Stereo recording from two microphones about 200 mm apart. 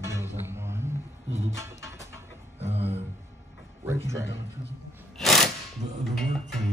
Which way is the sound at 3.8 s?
15° right (ahead or behind).